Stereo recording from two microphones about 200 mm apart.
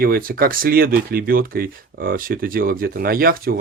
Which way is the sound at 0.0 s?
45° right (ahead or behind).